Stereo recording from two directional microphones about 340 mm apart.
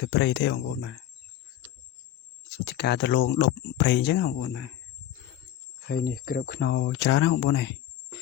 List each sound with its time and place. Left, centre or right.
0.0 s speech: left
2.6 s speech: left
5.9 s speech: left